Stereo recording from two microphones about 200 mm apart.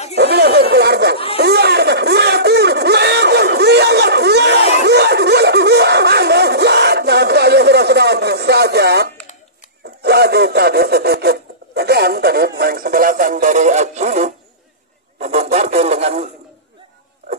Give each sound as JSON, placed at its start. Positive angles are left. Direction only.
{"t": 0.2, "sound": "speech", "side_deg": -55}
{"t": 1.1, "sound": "speech", "side_deg": 30}
{"t": 1.4, "sound": "a sound", "side_deg": -55}